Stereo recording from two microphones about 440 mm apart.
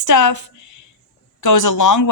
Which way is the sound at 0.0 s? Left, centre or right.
Left.